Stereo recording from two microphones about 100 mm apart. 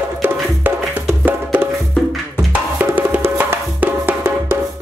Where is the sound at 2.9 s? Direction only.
20° right (ahead or behind).